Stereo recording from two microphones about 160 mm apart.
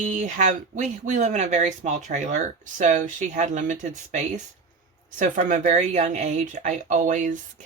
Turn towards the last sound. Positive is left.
turn(degrees=-50)  # may be behind; listen again after turning